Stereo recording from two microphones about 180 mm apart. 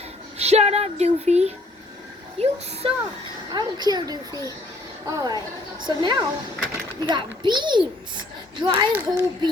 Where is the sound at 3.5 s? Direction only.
25° right (ahead or behind).